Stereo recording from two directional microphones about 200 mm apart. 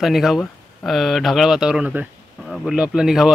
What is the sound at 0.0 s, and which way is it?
Speech, centre (ahead or behind).